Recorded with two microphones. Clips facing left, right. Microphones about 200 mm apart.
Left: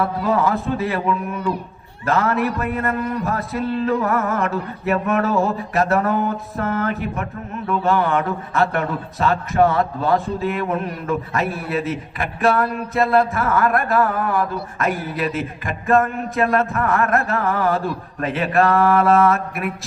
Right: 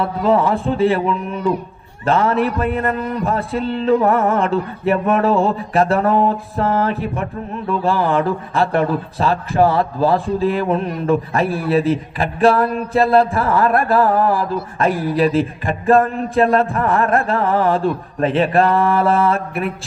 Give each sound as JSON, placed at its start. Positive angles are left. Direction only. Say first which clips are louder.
{"t": 0.0, "sound": "mantra", "louder": "right 3 dB", "side_deg": -30}
{"t": 7.7, "sound": "speech", "louder": "right 1 dB", "side_deg": -30}